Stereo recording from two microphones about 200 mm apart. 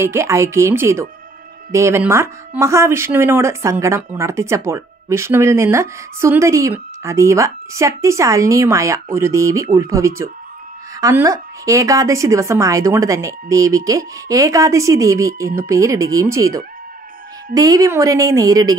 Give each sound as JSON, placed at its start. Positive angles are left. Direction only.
{"t": 0.0, "sound": "speech", "side_deg": -10}